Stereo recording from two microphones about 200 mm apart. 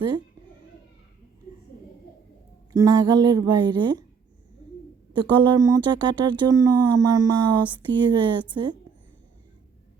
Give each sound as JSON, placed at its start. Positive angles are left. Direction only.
{"t": 2.7, "sound": "speech", "side_deg": -15}
{"t": 5.1, "sound": "speech", "side_deg": -25}